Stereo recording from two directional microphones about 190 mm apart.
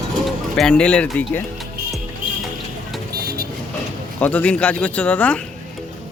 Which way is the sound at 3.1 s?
55° right (ahead or behind).